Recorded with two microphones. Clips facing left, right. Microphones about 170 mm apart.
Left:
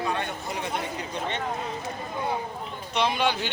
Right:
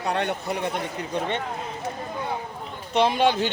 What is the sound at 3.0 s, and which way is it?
Speech, 40° right (ahead or behind).